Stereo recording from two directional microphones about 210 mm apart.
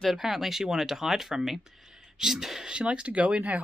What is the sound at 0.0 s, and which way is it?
Speech, centre (ahead or behind).